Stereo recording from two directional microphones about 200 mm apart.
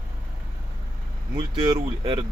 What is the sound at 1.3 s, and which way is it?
Speech, 25° right (ahead or behind).